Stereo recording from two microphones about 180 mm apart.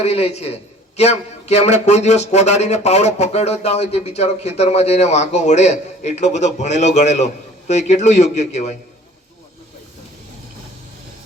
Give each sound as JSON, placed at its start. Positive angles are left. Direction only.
{"t": 0.0, "sound": "a man's voice", "side_deg": 35}